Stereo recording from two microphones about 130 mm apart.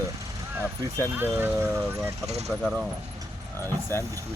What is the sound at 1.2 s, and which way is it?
Speech, 15° right (ahead or behind).